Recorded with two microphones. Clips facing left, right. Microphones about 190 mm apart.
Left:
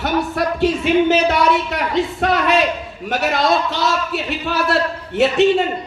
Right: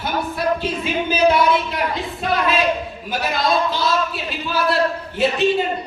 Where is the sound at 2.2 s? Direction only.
75° left (ahead or behind).